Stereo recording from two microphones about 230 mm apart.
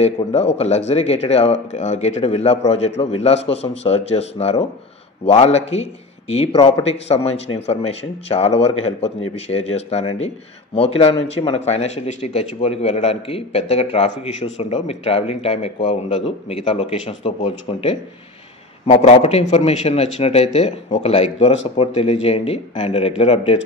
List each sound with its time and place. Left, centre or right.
0.0 s a man's voice: left